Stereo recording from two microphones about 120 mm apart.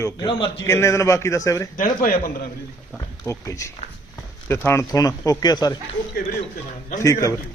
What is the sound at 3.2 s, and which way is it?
A man's voice, 25° left (ahead or behind).